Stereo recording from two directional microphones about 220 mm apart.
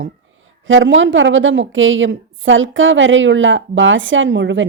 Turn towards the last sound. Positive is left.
turn(degrees=-55)  # may be behind; listen again after turning